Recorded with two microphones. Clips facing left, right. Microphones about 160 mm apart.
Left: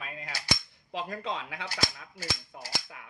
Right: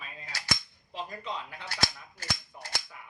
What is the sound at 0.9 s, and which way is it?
Speech, 75° left (ahead or behind).